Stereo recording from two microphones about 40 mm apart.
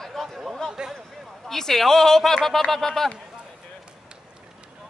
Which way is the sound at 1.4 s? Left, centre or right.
Centre.